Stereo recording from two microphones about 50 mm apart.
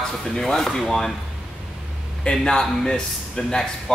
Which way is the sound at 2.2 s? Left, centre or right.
Centre.